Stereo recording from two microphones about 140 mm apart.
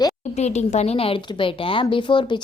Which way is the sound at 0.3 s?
50° left (ahead or behind).